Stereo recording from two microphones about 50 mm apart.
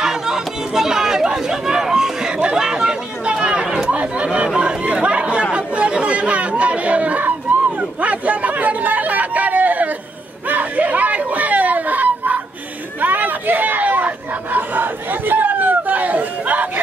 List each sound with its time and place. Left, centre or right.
0.0 s chatter: centre
3.9 s speech: right
4.6 s chatter: right
10.5 s a sound: right